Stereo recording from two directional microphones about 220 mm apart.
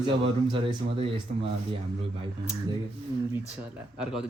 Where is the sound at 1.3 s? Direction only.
35° right (ahead or behind).